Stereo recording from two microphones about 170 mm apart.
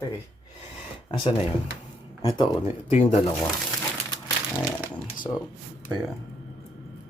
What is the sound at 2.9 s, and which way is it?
Speech, 35° left (ahead or behind).